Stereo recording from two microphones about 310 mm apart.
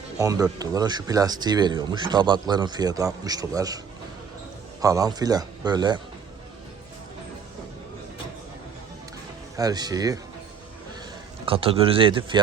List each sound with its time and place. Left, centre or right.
0.2 s speech: centre
4.8 s speech: centre
9.6 s speech: centre
11.4 s speech: centre